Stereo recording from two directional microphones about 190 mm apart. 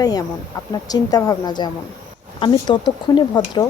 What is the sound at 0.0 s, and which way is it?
Speech, 20° left (ahead or behind).